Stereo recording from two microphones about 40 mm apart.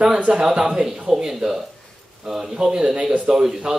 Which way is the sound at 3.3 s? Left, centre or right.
Centre.